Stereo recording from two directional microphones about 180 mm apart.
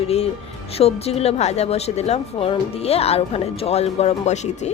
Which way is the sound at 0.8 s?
35° left (ahead or behind).